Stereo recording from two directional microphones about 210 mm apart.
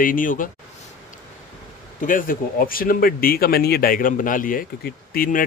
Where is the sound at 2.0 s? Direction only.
40° left (ahead or behind).